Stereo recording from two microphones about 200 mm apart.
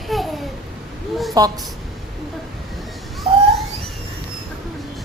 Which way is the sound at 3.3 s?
30° right (ahead or behind).